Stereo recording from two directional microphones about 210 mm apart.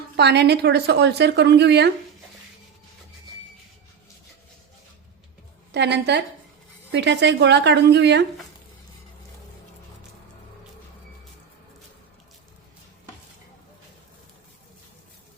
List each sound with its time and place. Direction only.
0.2 s a woman's voice: 50° right (ahead or behind)
5.7 s a woman's voice: 55° right (ahead or behind)